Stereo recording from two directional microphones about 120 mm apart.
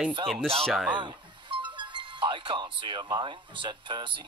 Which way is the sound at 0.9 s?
40° right (ahead or behind).